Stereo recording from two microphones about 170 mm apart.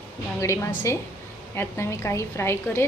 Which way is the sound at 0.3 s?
15° left (ahead or behind).